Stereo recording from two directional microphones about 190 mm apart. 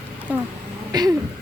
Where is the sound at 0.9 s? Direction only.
20° right (ahead or behind).